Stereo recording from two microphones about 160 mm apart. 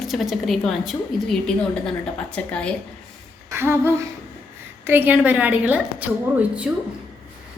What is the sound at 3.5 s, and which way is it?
A woman's voice, 15° right (ahead or behind).